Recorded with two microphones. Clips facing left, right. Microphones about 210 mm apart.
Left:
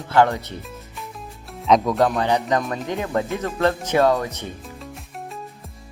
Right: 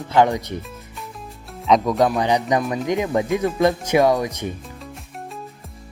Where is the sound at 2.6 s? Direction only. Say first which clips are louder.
Right 3 dB; 5° right (ahead or behind).